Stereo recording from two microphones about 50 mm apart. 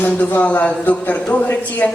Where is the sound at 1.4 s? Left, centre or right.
Left.